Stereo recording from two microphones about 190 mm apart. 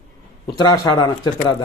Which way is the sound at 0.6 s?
25° left (ahead or behind).